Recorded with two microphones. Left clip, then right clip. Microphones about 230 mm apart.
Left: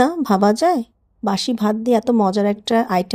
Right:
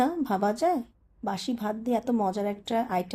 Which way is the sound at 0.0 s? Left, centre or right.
Left.